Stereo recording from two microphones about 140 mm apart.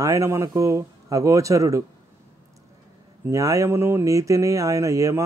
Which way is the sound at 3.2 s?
25° right (ahead or behind).